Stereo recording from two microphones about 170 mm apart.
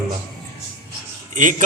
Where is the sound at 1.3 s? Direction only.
50° right (ahead or behind).